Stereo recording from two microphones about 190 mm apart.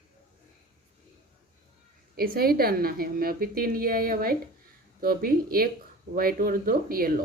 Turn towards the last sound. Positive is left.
turn(degrees=-50)  # may be behind; listen again after turning